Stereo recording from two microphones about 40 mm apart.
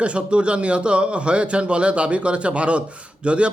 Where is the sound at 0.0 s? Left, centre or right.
Right.